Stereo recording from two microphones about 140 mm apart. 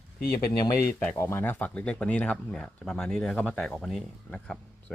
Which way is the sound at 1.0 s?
15° left (ahead or behind).